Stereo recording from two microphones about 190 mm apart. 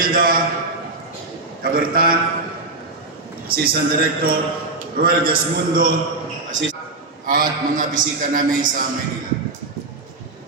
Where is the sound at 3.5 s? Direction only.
50° right (ahead or behind).